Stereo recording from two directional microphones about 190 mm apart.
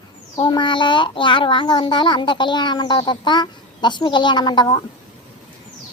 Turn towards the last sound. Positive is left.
turn(degrees=20)  # may be behind; listen again after turning